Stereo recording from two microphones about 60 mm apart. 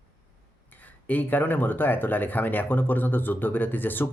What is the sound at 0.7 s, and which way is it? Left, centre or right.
Speech, left.